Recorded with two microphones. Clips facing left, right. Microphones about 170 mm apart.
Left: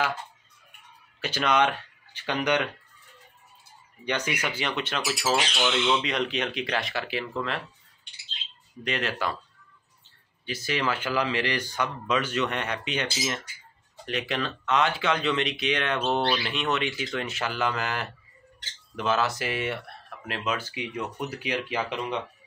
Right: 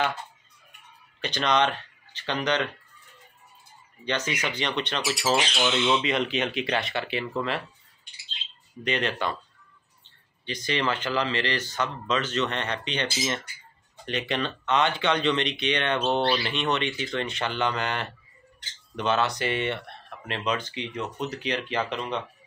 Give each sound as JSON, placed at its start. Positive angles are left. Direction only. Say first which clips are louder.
{"t": 1.2, "sound": "speech", "louder": "even", "side_deg": 5}
{"t": 4.0, "sound": "speech", "louder": "even", "side_deg": 10}
{"t": 5.4, "sound": "speech", "louder": "right 1 dB", "side_deg": -10}
{"t": 8.8, "sound": "speech", "louder": "right 2 dB", "side_deg": 0}
{"t": 10.4, "sound": "speech", "louder": "right 1 dB", "side_deg": 5}